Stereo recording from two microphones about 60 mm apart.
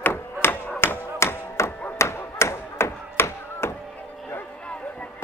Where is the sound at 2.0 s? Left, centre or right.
Left.